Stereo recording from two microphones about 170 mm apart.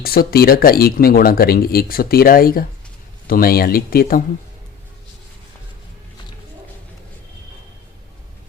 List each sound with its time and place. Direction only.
0.3 s speech: 60° left (ahead or behind)